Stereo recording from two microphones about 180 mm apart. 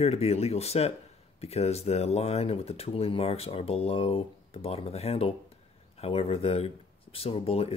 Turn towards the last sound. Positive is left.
turn(degrees=35)  # may be behind; listen again after turning